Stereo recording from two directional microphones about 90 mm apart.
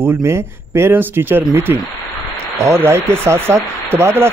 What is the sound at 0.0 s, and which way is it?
Speech, 25° right (ahead or behind).